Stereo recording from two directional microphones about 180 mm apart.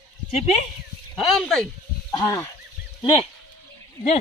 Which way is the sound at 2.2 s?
15° left (ahead or behind).